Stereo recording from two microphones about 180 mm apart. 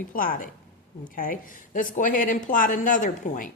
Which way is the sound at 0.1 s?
50° left (ahead or behind).